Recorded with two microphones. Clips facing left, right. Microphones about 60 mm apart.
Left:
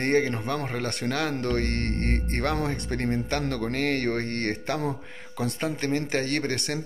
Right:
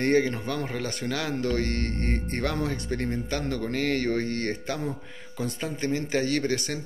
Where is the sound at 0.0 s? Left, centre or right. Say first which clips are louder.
Right 1 dB; left.